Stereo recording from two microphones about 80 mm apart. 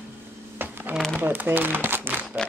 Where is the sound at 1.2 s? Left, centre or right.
Right.